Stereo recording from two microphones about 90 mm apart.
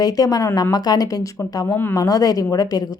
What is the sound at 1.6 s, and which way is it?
Speech, 25° left (ahead or behind).